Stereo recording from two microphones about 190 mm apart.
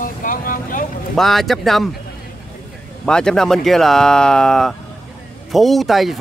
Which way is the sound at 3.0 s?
5° left (ahead or behind).